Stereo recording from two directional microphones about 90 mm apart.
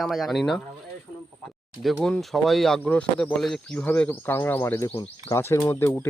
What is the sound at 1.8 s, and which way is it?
Speech, centre (ahead or behind).